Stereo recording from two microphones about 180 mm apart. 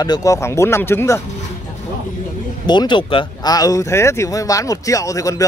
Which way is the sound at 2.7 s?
25° left (ahead or behind).